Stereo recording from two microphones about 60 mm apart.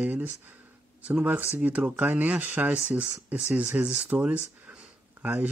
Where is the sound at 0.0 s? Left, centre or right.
Right.